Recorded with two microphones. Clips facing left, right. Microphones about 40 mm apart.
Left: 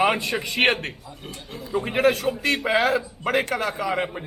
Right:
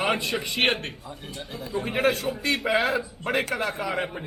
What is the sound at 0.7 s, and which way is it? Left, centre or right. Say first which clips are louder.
Speech: left 3 dB; left.